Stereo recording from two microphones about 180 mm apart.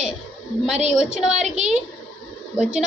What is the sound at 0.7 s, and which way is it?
Speech, 35° right (ahead or behind).